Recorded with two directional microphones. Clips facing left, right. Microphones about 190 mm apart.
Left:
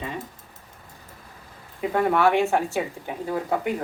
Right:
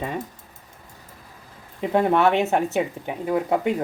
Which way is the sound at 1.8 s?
25° right (ahead or behind).